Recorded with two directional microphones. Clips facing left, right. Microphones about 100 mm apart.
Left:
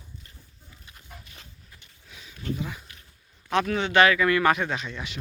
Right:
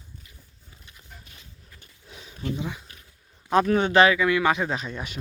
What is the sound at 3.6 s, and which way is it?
Speech, 40° right (ahead or behind).